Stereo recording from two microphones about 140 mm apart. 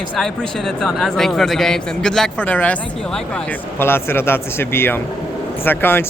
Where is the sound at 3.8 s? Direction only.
15° left (ahead or behind).